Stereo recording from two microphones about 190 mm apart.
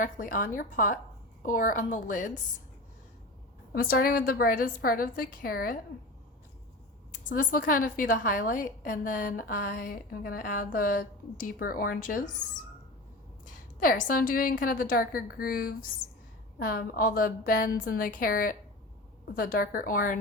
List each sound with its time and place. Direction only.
0.0 s a woman's voice: 45° left (ahead or behind)
3.8 s a woman's voice: 50° left (ahead or behind)
7.1 s a woman's voice: 45° left (ahead or behind)
13.4 s a woman's voice: 45° left (ahead or behind)